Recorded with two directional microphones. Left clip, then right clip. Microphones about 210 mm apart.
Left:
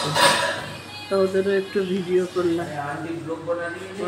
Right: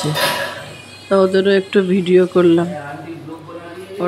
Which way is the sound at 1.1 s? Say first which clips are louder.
Right 8 dB; 45° right (ahead or behind).